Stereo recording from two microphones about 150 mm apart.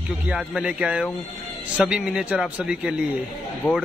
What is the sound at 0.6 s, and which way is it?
Speech, 10° right (ahead or behind).